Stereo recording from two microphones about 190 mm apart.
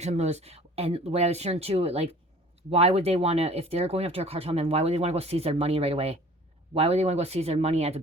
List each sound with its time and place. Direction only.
0.0 s speech: 35° right (ahead or behind)